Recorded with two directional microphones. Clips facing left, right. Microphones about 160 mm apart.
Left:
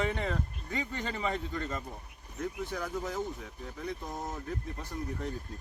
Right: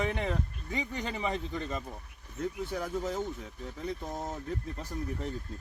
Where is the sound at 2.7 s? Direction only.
25° right (ahead or behind).